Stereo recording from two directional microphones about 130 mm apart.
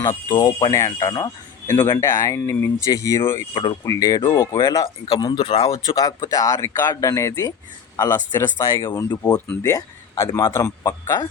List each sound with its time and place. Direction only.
0.3 s speech: 40° left (ahead or behind)
0.7 s speech: 20° left (ahead or behind)
3.5 s speech: 40° left (ahead or behind)
3.8 s speech: 25° left (ahead or behind)
4.3 s speech: 35° left (ahead or behind)
6.0 s speech: 25° left (ahead or behind)